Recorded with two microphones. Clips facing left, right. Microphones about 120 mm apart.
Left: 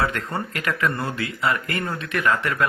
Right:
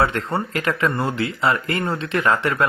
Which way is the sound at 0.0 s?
30° right (ahead or behind).